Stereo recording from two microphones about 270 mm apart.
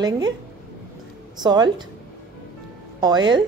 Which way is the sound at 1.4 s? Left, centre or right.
Centre.